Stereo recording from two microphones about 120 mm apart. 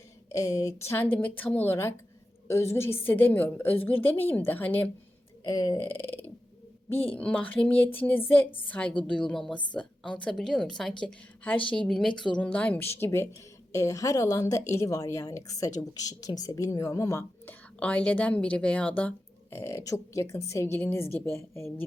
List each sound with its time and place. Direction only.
0.3 s a sound: 25° left (ahead or behind)
1.1 s speech: 15° left (ahead or behind)
5.5 s speech: 35° left (ahead or behind)
7.2 s a woman's voice: 10° left (ahead or behind)
17.7 s speech: 10° left (ahead or behind)